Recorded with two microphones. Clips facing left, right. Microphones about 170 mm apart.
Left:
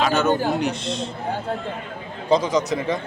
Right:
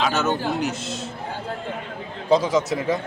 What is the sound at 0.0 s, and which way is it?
A man's voice, centre (ahead or behind).